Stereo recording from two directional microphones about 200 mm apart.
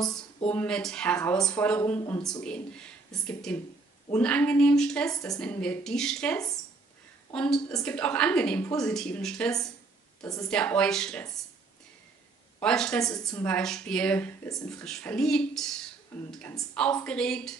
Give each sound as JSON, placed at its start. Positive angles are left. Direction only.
{"t": 0.5, "sound": "speech", "side_deg": 5}
{"t": 10.2, "sound": "a woman's voice", "side_deg": 15}
{"t": 10.5, "sound": "speech", "side_deg": 5}
{"t": 12.5, "sound": "speech", "side_deg": 5}